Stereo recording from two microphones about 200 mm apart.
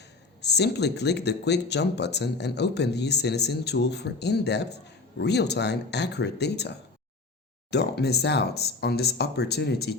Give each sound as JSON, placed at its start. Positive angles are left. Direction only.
{"t": 0.4, "sound": "speech", "side_deg": 55}